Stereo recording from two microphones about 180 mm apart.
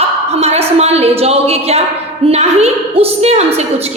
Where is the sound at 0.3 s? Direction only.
35° right (ahead or behind).